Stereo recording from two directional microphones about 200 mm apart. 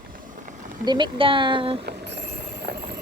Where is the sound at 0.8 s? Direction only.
25° right (ahead or behind).